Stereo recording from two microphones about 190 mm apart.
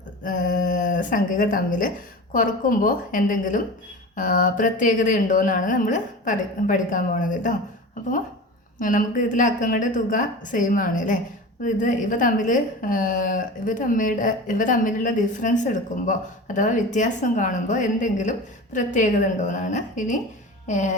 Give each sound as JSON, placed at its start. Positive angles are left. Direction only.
{"t": 0.3, "sound": "a woman's voice", "side_deg": 45}
{"t": 8.8, "sound": "a woman's voice", "side_deg": 45}